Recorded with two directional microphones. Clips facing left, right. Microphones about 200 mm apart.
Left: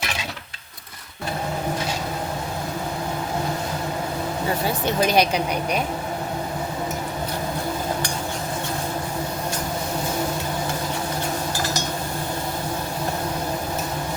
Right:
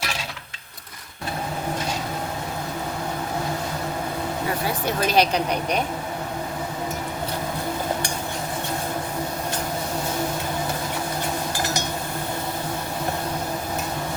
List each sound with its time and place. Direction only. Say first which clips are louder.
5.0 s a woman's voice: even; 15° left (ahead or behind)